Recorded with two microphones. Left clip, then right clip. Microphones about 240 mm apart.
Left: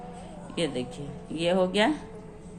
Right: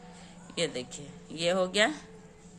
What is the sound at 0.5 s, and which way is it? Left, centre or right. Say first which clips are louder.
A woman's voice: left 2 dB; right.